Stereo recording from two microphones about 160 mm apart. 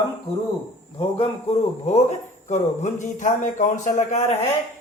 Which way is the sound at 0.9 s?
40° left (ahead or behind).